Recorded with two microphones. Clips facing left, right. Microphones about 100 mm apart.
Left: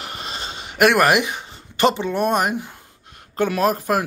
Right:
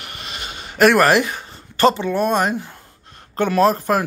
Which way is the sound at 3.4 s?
10° left (ahead or behind).